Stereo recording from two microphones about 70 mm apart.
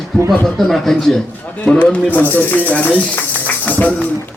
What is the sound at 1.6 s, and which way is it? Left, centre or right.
Speech, centre.